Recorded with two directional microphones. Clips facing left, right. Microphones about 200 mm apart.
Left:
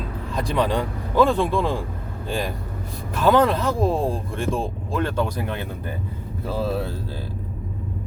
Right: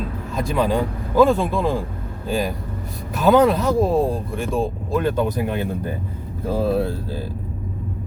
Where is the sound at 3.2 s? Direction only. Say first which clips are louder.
Right 3 dB; 10° right (ahead or behind).